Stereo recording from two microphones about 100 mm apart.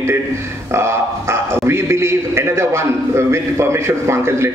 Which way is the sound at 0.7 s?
25° right (ahead or behind).